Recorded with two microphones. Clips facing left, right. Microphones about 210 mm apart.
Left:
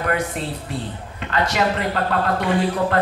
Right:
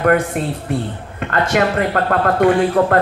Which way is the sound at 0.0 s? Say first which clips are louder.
Right 8 dB; 50° right (ahead or behind).